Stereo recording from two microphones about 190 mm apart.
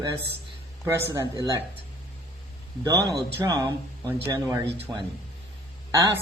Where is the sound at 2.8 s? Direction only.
20° right (ahead or behind).